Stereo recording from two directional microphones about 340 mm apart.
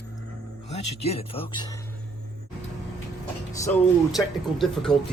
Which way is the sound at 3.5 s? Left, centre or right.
Centre.